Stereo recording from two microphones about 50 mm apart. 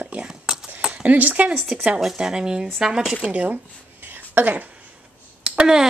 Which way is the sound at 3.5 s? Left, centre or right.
Right.